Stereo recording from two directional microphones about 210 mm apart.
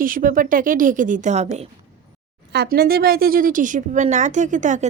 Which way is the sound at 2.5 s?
50° right (ahead or behind).